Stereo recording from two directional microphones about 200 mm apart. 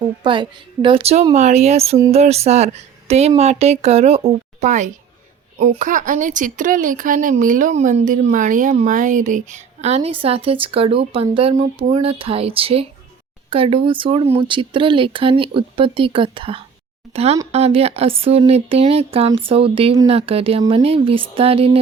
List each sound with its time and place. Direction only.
0.2 s speech: 25° right (ahead or behind)